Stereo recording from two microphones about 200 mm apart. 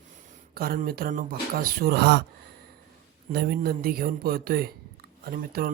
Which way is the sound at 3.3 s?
50° right (ahead or behind).